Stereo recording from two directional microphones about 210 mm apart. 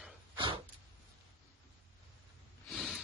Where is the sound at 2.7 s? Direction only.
Centre (ahead or behind).